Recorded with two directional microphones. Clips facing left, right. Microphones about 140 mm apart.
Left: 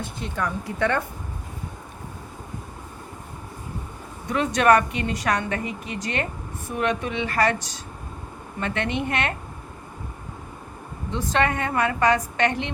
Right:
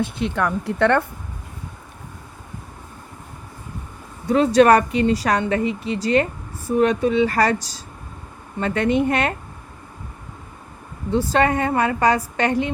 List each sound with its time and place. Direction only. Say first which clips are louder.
0.0 s speech: right 7 dB; 70° right (ahead or behind)
4.3 s speech: right 5 dB; 30° right (ahead or behind)
11.1 s speech: right 5 dB; 35° right (ahead or behind)